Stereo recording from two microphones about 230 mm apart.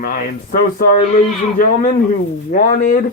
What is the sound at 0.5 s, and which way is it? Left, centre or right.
Speech, left.